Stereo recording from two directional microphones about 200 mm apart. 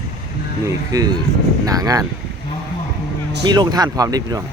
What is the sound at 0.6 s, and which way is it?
Speech, 20° right (ahead or behind).